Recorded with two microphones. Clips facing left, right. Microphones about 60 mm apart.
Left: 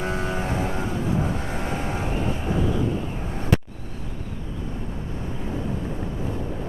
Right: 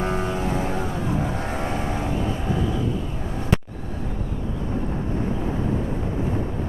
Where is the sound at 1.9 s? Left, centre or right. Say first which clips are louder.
Right 1 dB; left.